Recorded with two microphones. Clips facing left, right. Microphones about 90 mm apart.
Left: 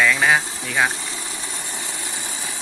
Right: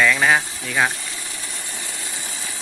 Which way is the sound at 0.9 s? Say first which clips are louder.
Left 1 dB; 25° left (ahead or behind).